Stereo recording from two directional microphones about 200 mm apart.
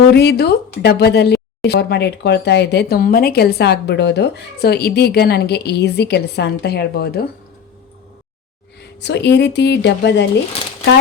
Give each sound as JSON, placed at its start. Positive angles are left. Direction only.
{"t": 0.1, "sound": "a woman's voice", "side_deg": 55}
{"t": 9.0, "sound": "a woman's voice", "side_deg": 60}